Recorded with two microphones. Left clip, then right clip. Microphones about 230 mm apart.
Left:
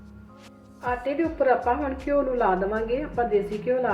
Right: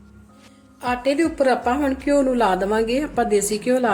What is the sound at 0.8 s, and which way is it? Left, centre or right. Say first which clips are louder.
Speech: right 6 dB; right.